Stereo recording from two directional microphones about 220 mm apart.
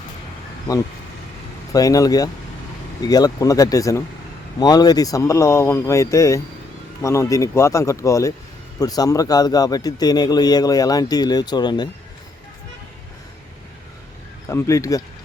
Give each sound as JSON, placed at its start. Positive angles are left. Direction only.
{"t": 1.7, "sound": "a man's voice", "side_deg": 15}
{"t": 14.4, "sound": "a man's voice", "side_deg": 15}